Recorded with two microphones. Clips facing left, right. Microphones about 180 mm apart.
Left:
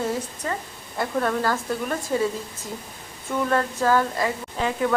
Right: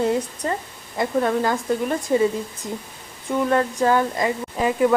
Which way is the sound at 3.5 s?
15° right (ahead or behind).